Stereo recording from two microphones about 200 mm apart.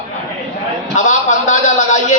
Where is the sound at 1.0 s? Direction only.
40° left (ahead or behind).